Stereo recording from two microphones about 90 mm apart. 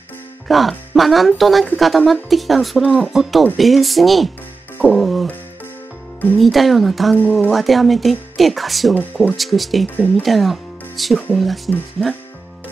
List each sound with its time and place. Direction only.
0.5 s speech: centre (ahead or behind)
4.8 s music: centre (ahead or behind)
6.3 s speech: centre (ahead or behind)
9.9 s speech: 15° left (ahead or behind)
10.2 s speech: centre (ahead or behind)